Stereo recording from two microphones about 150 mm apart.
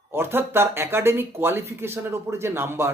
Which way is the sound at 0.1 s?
15° right (ahead or behind).